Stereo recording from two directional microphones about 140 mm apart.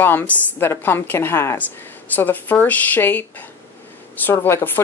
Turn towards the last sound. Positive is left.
turn(degrees=15)  # may be behind; listen again after turning